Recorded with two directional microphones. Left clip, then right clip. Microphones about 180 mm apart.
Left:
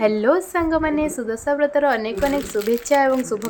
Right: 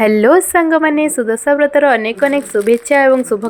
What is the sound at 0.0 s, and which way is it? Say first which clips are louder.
A woman's voice: right 8 dB; 35° right (ahead or behind).